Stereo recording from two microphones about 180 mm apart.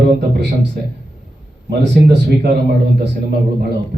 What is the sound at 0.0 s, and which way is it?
Speech, 65° right (ahead or behind).